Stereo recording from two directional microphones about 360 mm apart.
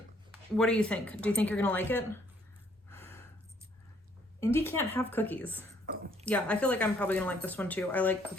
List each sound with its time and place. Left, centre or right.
0.5 s speech: centre
2.9 s gasp: centre
4.4 s speech: centre
5.8 s a sound: right
6.2 s speech: centre